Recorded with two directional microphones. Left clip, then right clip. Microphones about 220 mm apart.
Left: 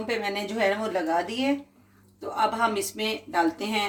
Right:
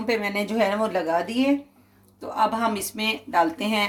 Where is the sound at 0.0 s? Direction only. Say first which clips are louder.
Right 4 dB; 40° right (ahead or behind).